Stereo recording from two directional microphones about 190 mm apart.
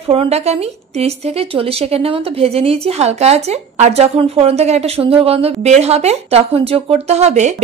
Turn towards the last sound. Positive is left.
turn(degrees=-35)  # may be behind; listen again after turning